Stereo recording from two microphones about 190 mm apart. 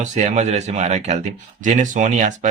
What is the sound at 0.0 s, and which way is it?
Speech, 40° right (ahead or behind).